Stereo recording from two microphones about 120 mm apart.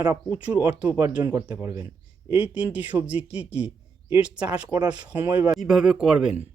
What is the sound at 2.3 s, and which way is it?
Speech, 10° right (ahead or behind).